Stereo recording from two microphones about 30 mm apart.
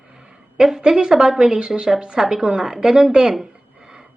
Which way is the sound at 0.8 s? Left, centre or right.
Right.